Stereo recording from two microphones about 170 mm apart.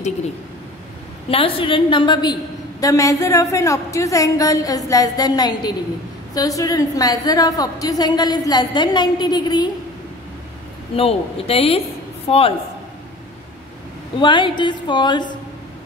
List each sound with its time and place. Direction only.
1.3 s a woman's voice: 30° left (ahead or behind)
11.0 s a woman's voice: 35° left (ahead or behind)
14.2 s a woman's voice: 30° left (ahead or behind)